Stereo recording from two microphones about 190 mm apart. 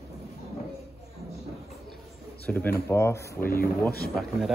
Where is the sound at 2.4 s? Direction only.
10° left (ahead or behind).